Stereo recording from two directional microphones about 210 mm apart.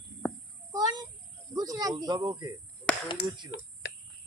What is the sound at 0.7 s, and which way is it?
A child's voice, 20° right (ahead or behind).